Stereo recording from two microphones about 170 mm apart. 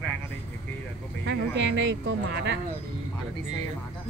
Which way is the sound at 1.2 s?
90° right.